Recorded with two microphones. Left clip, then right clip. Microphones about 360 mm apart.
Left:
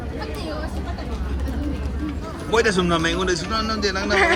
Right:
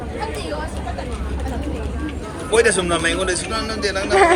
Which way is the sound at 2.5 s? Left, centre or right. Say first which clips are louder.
Right 3 dB; centre.